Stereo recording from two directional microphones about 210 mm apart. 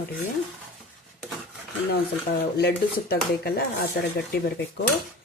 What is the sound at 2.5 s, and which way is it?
Speech, 50° left (ahead or behind).